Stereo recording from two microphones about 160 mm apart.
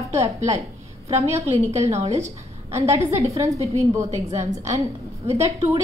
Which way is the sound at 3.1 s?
20° right (ahead or behind).